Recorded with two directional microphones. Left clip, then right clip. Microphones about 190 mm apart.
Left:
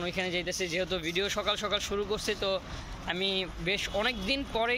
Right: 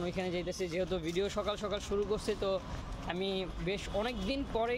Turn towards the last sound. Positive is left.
turn(degrees=-5)  # may be behind; listen again after turning